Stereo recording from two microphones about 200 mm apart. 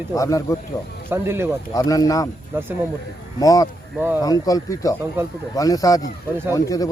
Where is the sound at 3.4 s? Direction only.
15° left (ahead or behind).